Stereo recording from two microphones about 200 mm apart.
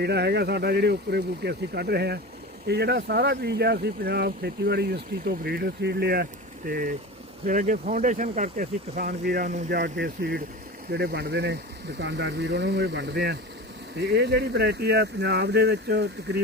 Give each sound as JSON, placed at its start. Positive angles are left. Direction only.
{"t": 0.0, "sound": "speech", "side_deg": -55}
{"t": 7.4, "sound": "speech", "side_deg": -40}